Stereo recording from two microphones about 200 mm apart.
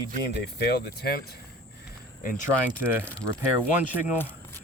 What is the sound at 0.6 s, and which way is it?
Speech, 50° left (ahead or behind).